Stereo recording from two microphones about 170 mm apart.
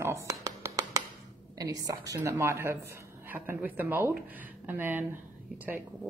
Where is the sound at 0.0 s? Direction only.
15° right (ahead or behind).